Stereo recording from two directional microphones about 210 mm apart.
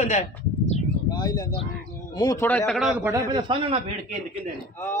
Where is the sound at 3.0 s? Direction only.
15° right (ahead or behind).